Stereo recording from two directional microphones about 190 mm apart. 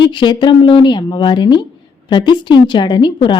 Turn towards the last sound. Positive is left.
turn(degrees=25)  # may be behind; listen again after turning